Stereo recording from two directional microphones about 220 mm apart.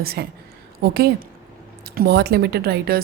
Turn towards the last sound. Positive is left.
turn(degrees=-45)  # may be behind; listen again after turning